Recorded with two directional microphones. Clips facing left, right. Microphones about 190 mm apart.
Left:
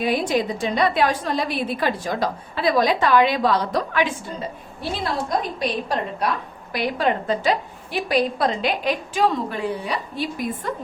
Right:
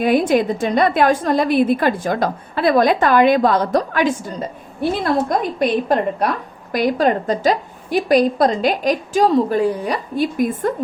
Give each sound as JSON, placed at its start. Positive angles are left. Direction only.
{"t": 0.0, "sound": "a woman's voice", "side_deg": -50}